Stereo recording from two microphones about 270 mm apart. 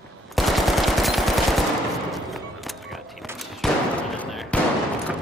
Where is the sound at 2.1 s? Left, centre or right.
Centre.